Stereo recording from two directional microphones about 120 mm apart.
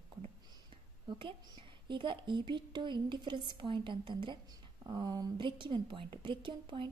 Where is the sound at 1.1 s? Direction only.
45° right (ahead or behind).